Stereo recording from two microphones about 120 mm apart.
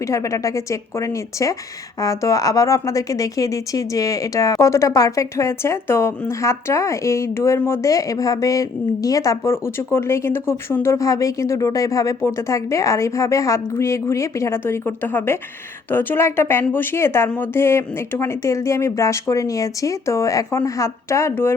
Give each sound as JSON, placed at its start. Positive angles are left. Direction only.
{"t": 0.0, "sound": "a woman's voice", "side_deg": 25}